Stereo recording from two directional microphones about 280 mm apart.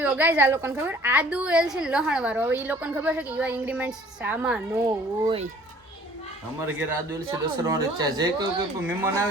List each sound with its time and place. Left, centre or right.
0.0 s a woman's voice: centre
5.2 s a child's voice: centre
6.7 s speech: centre